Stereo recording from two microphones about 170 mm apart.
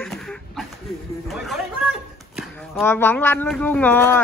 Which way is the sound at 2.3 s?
Centre (ahead or behind).